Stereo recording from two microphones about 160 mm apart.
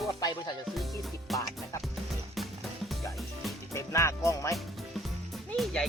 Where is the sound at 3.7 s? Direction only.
20° left (ahead or behind).